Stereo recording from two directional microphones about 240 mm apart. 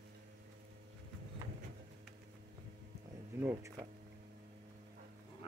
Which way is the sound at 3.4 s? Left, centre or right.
Centre.